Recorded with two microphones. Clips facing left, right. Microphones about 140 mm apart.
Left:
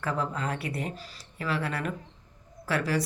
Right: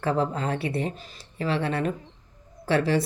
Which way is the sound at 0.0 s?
30° right (ahead or behind).